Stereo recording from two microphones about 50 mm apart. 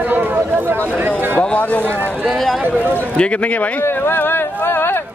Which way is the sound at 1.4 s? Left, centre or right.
Left.